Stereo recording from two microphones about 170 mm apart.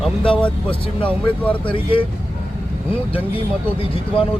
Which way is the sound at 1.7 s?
30° left (ahead or behind).